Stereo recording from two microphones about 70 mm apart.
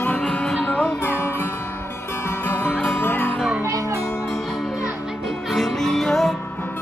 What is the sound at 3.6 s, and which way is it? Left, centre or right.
Music, right.